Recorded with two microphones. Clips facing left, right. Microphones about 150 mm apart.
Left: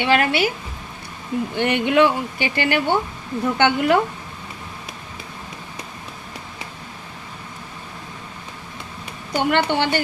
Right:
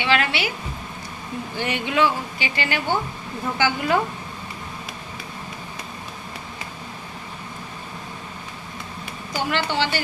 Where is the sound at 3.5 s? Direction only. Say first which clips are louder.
Left 4 dB; 65° left (ahead or behind).